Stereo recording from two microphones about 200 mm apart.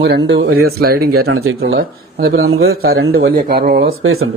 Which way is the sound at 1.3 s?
90° right.